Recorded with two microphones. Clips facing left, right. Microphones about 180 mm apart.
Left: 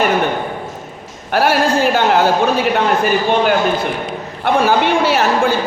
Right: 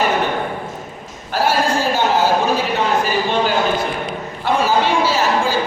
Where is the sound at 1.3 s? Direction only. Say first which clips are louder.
Left 3 dB; 65° left (ahead or behind).